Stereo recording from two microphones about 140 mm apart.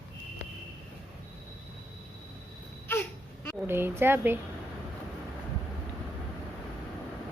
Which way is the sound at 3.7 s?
15° right (ahead or behind).